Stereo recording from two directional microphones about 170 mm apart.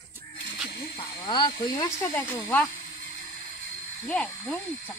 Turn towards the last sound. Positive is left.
turn(degrees=5)  # may be behind; listen again after turning